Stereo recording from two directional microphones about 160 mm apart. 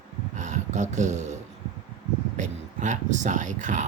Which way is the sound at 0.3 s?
50° right (ahead or behind).